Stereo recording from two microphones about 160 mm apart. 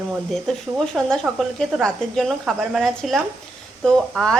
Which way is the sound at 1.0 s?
5° left (ahead or behind).